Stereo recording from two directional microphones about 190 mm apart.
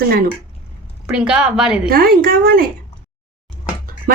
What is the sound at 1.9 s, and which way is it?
Speech, 50° right (ahead or behind).